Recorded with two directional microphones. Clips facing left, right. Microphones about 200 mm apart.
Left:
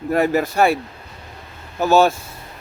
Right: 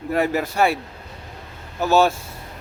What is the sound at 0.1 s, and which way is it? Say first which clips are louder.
Speech: left 3 dB; 45° left (ahead or behind).